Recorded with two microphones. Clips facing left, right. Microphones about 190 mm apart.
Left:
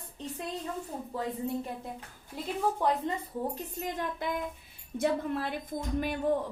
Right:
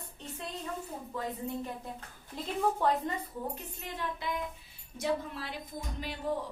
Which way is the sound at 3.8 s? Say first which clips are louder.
Left 4 dB; 50° left (ahead or behind).